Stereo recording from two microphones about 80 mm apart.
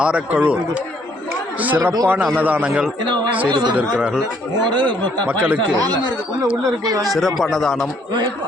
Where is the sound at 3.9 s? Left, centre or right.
Centre.